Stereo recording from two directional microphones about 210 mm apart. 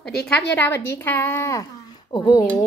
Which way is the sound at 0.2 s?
5° left (ahead or behind).